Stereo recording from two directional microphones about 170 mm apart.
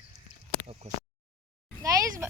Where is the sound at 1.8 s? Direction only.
20° right (ahead or behind).